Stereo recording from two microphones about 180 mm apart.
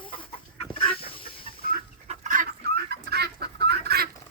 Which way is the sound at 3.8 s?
60° right (ahead or behind).